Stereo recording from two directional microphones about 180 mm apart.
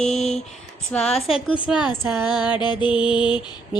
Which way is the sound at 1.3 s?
30° left (ahead or behind).